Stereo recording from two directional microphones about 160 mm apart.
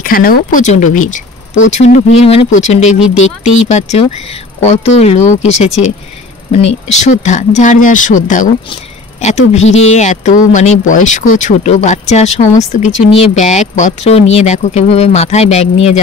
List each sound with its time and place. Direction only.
0.0 s speech: 65° left (ahead or behind); by 16.0 s 45° left (ahead or behind)